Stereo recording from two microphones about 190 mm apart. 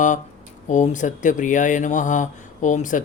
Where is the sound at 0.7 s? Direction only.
40° left (ahead or behind).